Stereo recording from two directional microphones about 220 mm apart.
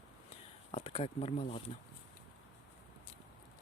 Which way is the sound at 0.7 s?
25° left (ahead or behind).